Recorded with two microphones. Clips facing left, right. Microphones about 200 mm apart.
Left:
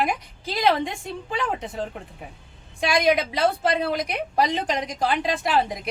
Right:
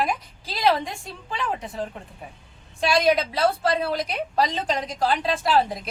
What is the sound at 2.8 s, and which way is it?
A woman's voice, 15° left (ahead or behind).